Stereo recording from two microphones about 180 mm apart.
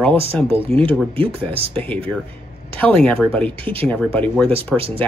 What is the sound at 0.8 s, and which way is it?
Speech, 10° left (ahead or behind).